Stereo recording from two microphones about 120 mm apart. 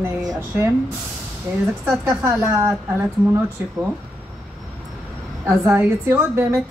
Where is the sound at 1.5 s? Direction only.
25° right (ahead or behind).